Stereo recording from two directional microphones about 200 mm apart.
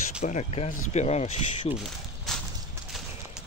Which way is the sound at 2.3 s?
Centre (ahead or behind).